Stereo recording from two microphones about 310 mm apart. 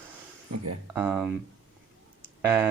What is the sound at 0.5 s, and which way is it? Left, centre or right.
Speech, right.